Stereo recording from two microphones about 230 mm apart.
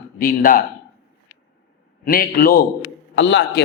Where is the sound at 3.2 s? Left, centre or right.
Left.